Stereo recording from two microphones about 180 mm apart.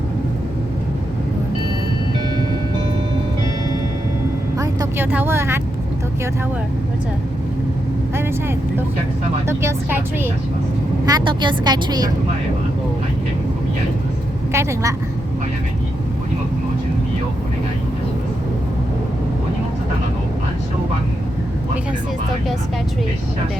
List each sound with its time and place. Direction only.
4.5 s vehicle: 20° right (ahead or behind)
8.1 s speech: 15° right (ahead or behind)
11.0 s speech: 25° right (ahead or behind)
14.5 s speech: 15° right (ahead or behind)